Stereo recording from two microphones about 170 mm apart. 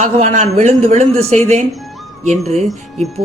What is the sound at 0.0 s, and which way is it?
A woman's voice, 40° right (ahead or behind).